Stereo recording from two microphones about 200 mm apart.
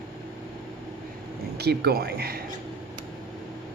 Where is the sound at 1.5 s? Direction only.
55° right (ahead or behind).